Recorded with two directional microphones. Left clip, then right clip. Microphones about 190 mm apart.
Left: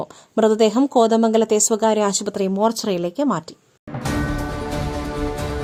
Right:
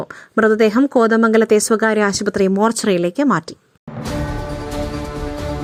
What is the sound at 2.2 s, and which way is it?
Speech, 30° right (ahead or behind).